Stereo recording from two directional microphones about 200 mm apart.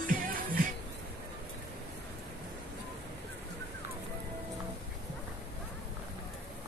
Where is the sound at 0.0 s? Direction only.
45° right (ahead or behind).